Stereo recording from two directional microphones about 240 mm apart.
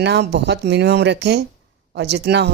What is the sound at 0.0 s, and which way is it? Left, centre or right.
A woman's voice, right.